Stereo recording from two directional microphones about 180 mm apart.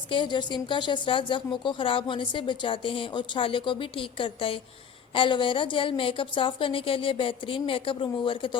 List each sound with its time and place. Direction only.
0.1 s a woman's voice: 25° left (ahead or behind)